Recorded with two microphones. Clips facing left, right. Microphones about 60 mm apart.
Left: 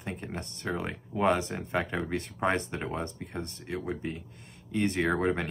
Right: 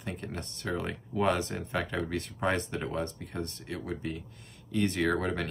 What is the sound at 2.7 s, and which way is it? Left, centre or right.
Speech, left.